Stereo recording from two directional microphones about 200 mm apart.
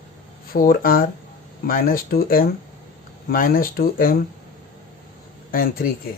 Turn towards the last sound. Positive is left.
turn(degrees=45)  # may be behind; listen again after turning